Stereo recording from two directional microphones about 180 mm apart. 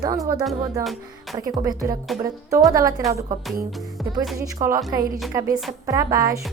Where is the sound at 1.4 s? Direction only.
20° right (ahead or behind).